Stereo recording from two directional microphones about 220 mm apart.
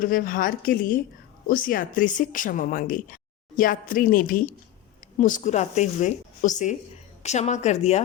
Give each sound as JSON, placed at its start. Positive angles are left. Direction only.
{"t": 0.0, "sound": "speech", "side_deg": 40}